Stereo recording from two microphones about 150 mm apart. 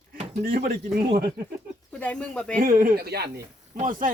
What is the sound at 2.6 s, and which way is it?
Speech, 75° right (ahead or behind).